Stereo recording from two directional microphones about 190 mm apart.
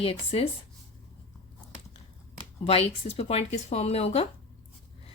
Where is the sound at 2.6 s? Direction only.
30° left (ahead or behind).